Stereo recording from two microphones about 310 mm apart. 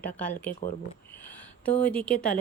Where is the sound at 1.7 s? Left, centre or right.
Centre.